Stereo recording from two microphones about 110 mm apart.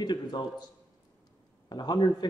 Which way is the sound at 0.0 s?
40° left (ahead or behind).